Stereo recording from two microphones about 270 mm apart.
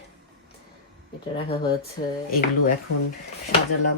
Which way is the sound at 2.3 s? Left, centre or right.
Left.